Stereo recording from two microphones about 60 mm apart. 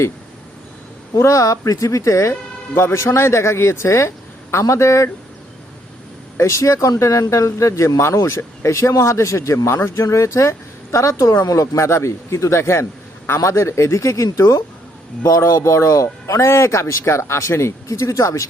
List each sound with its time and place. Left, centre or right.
1.1 s a man's voice: left
6.3 s speech: left
7.0 s speech: left
11.4 s speech: left
11.8 s a man's voice: left
13.4 s speech: left
15.2 s speech: left